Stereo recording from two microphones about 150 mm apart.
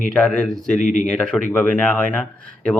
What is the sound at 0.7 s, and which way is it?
Speech, 55° left (ahead or behind).